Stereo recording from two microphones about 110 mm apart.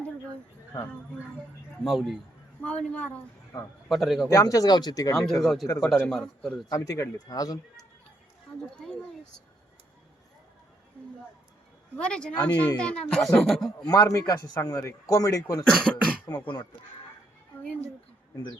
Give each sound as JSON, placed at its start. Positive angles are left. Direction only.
{"t": 1.8, "sound": "a man's voice", "side_deg": 0}
{"t": 2.6, "sound": "speech", "side_deg": 10}
{"t": 3.8, "sound": "a man's voice", "side_deg": 0}
{"t": 4.3, "sound": "a man's voice", "side_deg": 35}
{"t": 5.1, "sound": "a man's voice", "side_deg": 5}
{"t": 6.7, "sound": "a man's voice", "side_deg": 30}
{"t": 8.7, "sound": "a sound", "side_deg": 5}
{"t": 11.9, "sound": "speech", "side_deg": 10}
{"t": 13.8, "sound": "a man's voice", "side_deg": 35}
{"t": 15.6, "sound": "a man's voice", "side_deg": 5}
{"t": 16.3, "sound": "a man's voice", "side_deg": 30}
{"t": 17.6, "sound": "a woman's voice", "side_deg": 10}